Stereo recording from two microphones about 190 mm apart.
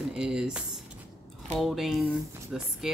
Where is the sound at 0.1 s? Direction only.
5° right (ahead or behind).